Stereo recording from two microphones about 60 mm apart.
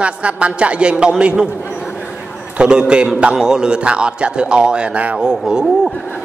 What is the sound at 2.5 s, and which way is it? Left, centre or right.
A man's voice, centre.